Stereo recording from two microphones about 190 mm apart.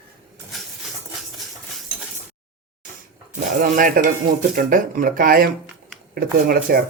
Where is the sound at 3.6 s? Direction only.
45° right (ahead or behind).